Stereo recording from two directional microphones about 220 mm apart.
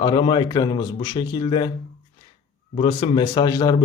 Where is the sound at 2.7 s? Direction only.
25° left (ahead or behind).